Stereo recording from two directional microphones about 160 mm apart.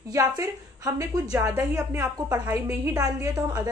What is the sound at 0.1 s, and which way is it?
A woman's voice, 25° right (ahead or behind).